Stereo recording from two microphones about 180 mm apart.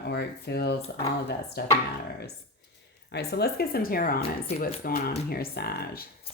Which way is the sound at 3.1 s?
65° left (ahead or behind).